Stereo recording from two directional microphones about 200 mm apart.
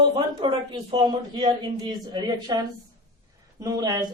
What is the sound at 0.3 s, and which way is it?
Speech, 25° right (ahead or behind).